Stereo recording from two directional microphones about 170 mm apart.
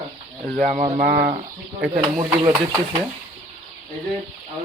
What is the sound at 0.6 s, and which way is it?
Speech, 55° right (ahead or behind).